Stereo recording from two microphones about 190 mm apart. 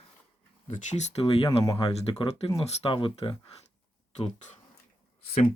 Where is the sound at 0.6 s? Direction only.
40° left (ahead or behind).